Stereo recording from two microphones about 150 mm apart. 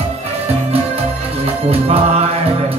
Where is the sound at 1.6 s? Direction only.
40° right (ahead or behind).